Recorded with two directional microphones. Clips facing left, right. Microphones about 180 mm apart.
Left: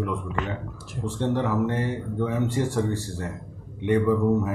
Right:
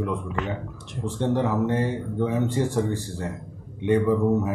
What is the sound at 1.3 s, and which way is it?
A man's voice, 15° right (ahead or behind).